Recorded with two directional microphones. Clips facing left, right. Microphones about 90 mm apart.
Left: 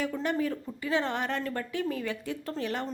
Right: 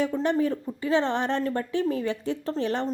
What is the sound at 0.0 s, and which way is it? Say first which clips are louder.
Speech: right 5 dB; 25° right (ahead or behind).